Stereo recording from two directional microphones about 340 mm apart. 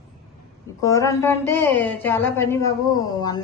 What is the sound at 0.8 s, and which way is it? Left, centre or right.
A woman's voice, centre.